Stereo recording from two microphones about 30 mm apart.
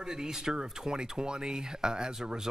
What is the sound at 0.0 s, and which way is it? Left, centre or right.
Speech, right.